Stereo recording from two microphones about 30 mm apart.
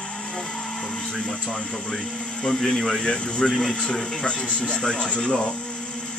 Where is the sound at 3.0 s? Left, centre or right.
Left.